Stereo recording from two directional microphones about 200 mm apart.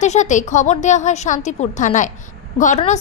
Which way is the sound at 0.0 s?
35° left (ahead or behind).